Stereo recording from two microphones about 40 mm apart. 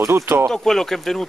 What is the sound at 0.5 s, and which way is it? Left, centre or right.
Speech, centre.